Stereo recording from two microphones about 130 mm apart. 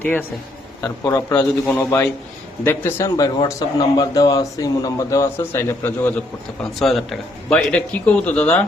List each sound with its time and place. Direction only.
0.0 s a man's voice: 15° left (ahead or behind)
0.8 s a man's voice: 25° left (ahead or behind)
3.2 s speech: 30° left (ahead or behind)
6.6 s a man's voice: centre (ahead or behind)